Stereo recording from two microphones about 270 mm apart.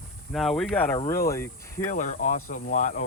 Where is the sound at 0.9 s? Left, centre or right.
Centre.